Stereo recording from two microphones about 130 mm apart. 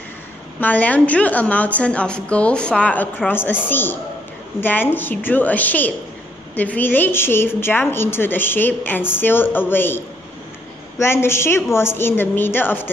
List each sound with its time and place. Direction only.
0.6 s a woman's voice: 10° left (ahead or behind)